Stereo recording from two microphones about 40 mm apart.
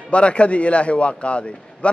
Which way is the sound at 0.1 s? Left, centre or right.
Left.